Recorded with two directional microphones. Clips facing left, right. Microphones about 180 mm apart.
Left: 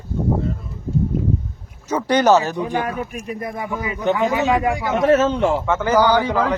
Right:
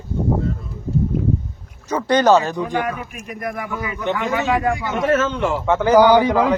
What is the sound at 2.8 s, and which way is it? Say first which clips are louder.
A man's voice: left 1 dB; 30° left (ahead or behind).